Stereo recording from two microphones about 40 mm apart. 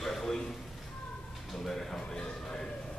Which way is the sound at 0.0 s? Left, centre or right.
Centre.